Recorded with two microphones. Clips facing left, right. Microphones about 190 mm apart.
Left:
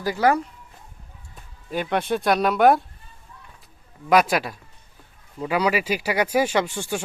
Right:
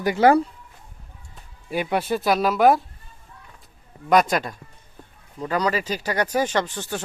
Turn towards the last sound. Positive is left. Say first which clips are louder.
# left 2 dB
turn(degrees=10)  # may be behind; listen again after turning